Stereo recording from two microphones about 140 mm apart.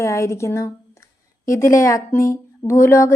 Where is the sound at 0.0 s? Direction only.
20° left (ahead or behind).